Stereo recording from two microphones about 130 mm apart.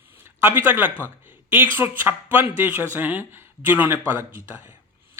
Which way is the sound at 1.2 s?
15° right (ahead or behind).